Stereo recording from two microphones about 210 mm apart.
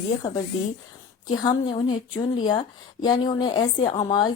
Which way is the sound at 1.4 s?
20° left (ahead or behind).